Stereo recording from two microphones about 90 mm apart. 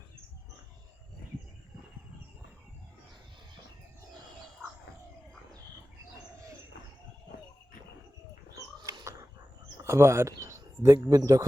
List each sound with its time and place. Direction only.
8.5 s pig: 40° right (ahead or behind)
9.8 s speech: 30° right (ahead or behind)